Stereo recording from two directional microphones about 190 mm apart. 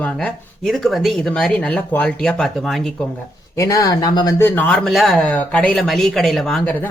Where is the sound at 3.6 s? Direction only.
15° left (ahead or behind).